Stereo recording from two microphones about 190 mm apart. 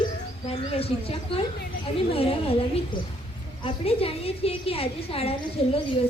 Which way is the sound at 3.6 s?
30° left (ahead or behind).